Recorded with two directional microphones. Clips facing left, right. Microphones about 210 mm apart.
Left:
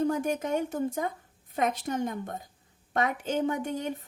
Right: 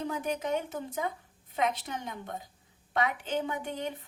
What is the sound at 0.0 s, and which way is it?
A woman's voice, 45° left (ahead or behind).